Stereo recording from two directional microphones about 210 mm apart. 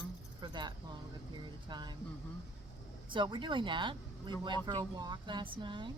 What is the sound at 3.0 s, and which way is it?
Speech, 20° right (ahead or behind).